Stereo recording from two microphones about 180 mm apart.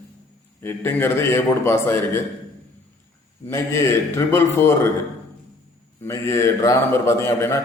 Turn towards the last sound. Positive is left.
turn(degrees=15)  # may be behind; listen again after turning